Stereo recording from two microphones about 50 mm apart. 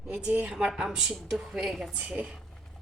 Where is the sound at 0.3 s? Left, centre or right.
Right.